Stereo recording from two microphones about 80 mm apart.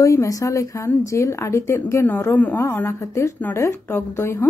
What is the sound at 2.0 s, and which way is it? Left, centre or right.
A woman's voice, left.